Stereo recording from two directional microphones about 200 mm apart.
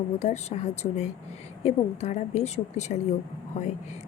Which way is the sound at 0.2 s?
35° left (ahead or behind).